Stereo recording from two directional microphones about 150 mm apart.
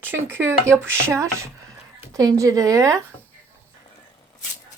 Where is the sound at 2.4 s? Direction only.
20° right (ahead or behind).